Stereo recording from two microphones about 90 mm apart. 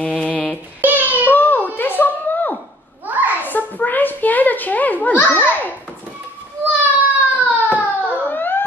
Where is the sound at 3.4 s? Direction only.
20° left (ahead or behind).